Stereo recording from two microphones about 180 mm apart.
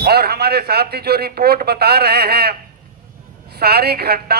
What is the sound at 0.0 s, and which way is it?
A man's voice, 60° right (ahead or behind).